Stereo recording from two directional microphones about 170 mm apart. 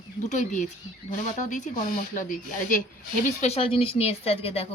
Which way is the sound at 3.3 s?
40° left (ahead or behind).